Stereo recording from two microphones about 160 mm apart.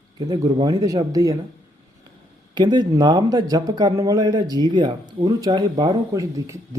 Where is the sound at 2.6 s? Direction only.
25° right (ahead or behind).